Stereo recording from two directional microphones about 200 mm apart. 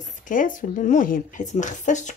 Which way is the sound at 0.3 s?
40° left (ahead or behind).